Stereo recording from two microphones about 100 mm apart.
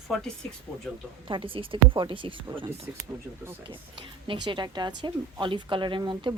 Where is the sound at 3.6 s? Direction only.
60° right (ahead or behind).